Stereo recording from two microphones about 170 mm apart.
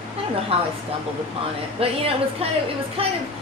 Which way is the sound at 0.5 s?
35° right (ahead or behind).